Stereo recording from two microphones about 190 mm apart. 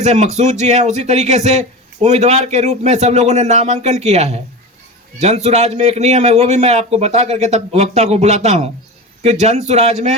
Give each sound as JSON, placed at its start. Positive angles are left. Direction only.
{"t": 0.0, "sound": "speech", "side_deg": -35}